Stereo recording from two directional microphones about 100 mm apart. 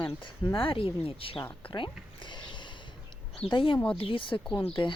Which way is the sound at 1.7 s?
50° left (ahead or behind).